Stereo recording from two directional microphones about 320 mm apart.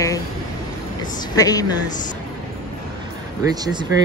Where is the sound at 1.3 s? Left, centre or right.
Centre.